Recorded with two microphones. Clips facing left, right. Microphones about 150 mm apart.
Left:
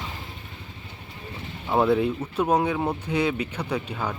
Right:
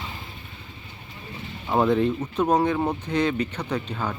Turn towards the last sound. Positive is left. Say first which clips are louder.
# even
turn(degrees=10)  # may be behind; listen again after turning